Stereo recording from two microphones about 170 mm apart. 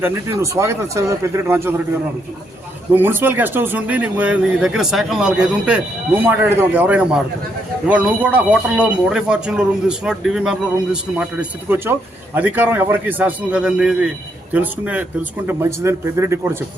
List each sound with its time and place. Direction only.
0.0 s speech: 15° right (ahead or behind)
2.9 s speech: 10° right (ahead or behind)